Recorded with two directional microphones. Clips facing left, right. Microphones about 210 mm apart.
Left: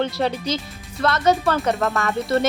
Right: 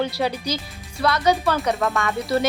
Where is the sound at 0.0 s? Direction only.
5° right (ahead or behind).